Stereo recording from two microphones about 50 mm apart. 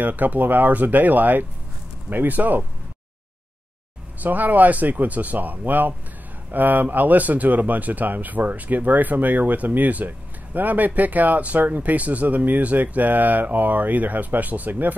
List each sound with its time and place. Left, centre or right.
0.0 s speech: right
4.2 s speech: right